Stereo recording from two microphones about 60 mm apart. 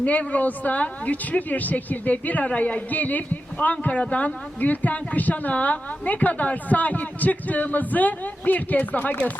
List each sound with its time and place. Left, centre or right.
0.0 s a woman's voice: left